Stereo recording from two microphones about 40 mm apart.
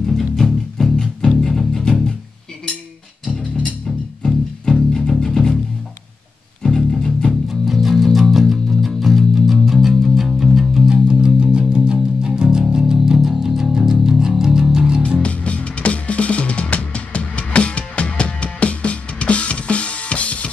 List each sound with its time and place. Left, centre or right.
0.0 s music: centre
4.6 s music: centre
6.9 s music: centre
7.2 s music: centre
10.9 s music: right
15.2 s drum: left